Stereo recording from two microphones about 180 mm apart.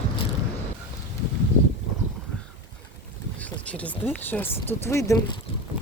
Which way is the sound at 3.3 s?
10° left (ahead or behind).